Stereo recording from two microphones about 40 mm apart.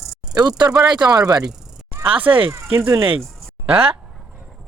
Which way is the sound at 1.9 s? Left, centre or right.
Right.